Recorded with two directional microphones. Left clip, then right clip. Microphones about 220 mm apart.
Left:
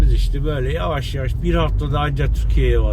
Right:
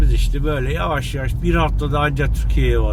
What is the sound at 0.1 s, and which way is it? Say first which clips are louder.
Speech: right 2 dB; 20° right (ahead or behind).